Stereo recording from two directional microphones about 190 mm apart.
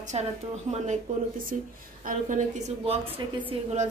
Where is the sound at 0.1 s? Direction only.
35° right (ahead or behind).